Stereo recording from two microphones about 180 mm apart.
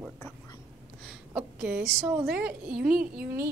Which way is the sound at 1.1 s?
5° right (ahead or behind).